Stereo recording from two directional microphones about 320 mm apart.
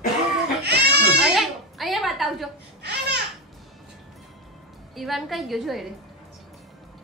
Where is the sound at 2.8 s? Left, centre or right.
Right.